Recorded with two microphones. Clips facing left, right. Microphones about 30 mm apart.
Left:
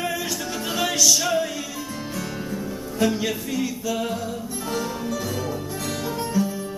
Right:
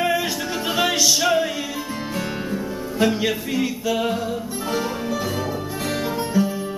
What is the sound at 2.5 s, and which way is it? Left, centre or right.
Music, right.